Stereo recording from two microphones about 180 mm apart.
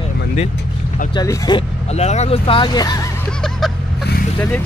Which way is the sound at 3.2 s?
Centre (ahead or behind).